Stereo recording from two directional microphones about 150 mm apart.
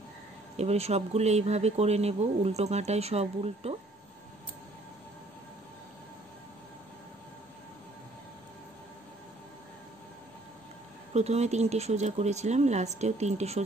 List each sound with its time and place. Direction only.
0.6 s speech: 45° right (ahead or behind)
11.1 s speech: 45° right (ahead or behind)